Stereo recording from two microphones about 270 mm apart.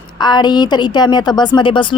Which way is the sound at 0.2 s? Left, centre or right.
Centre.